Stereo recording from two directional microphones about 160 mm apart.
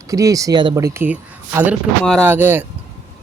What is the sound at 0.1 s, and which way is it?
Speech, 20° right (ahead or behind).